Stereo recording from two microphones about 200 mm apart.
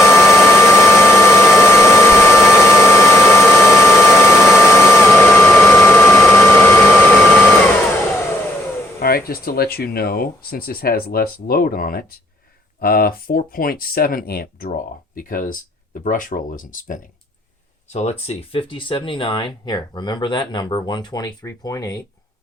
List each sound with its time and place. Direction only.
0.0 s vacuum cleaner: 15° left (ahead or behind)
9.0 s speech: 50° left (ahead or behind); by 22.0 s 15° left (ahead or behind)